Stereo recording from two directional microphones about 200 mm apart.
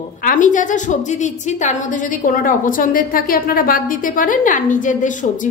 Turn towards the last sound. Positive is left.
turn(degrees=40)  # may be behind; listen again after turning